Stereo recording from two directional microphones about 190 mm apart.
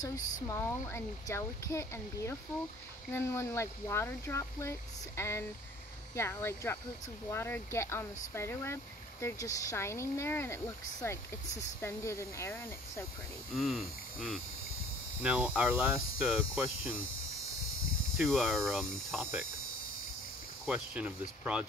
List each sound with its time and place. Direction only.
0.0 s speech: 15° left (ahead or behind)
13.6 s hum: centre (ahead or behind)
18.1 s hum: centre (ahead or behind)
20.6 s ratchet: 5° right (ahead or behind)